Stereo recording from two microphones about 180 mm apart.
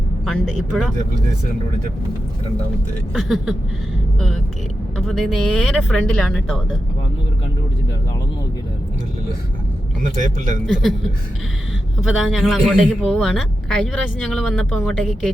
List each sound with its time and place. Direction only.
0.3 s speech: centre (ahead or behind)
3.1 s speech: centre (ahead or behind)
4.9 s speech: centre (ahead or behind)
10.0 s a man's voice: 45° right (ahead or behind)
10.8 s speech: centre (ahead or behind)